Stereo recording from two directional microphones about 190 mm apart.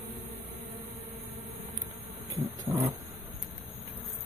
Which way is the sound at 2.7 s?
15° right (ahead or behind).